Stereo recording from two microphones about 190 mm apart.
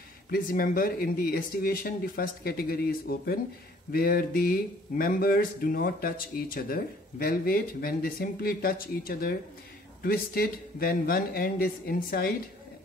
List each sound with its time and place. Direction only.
0.3 s speech: 50° left (ahead or behind)